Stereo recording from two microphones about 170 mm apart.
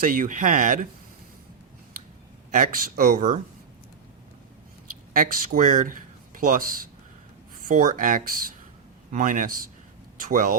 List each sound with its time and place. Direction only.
0.0 s speech: 50° right (ahead or behind)
2.5 s speech: 55° right (ahead or behind)
5.1 s speech: 55° right (ahead or behind)
7.7 s speech: 50° right (ahead or behind)